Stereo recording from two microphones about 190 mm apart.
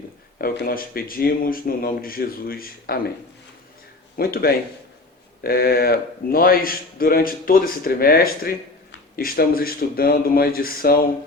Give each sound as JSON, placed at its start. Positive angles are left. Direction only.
{"t": 0.4, "sound": "a man's voice", "side_deg": 50}
{"t": 4.2, "sound": "a man's voice", "side_deg": 55}